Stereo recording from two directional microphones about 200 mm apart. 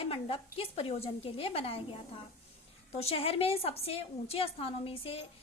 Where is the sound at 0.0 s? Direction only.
30° left (ahead or behind).